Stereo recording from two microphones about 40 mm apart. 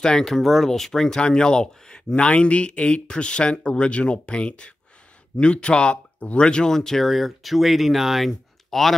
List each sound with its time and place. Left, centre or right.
0.0 s speech: centre
6.1 s speech: left
6.4 s speech: left
7.1 s speech: centre